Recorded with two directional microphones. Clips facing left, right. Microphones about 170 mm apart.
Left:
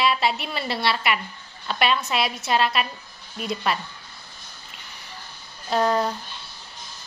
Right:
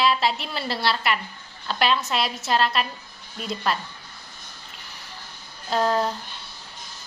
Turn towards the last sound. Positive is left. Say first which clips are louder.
# left 1 dB
turn(degrees=0)  # may be behind; listen again after turning